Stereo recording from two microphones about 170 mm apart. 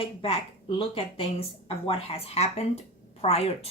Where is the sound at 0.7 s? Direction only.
35° left (ahead or behind).